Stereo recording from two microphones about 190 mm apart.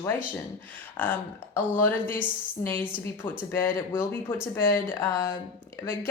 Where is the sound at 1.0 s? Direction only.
10° left (ahead or behind).